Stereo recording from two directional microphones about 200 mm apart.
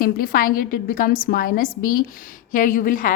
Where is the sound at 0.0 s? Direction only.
45° left (ahead or behind).